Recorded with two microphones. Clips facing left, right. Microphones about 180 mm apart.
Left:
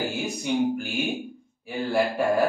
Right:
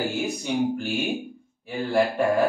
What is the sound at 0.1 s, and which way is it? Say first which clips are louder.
Music: right 3 dB; centre (ahead or behind).